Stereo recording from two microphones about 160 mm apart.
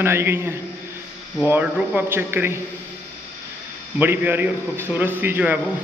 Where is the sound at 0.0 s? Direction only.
15° right (ahead or behind).